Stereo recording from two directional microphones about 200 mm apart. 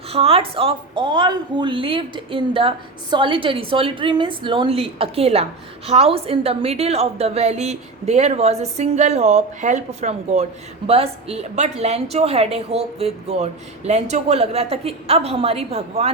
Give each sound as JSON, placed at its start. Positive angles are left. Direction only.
{"t": 0.1, "sound": "a woman's voice", "side_deg": -30}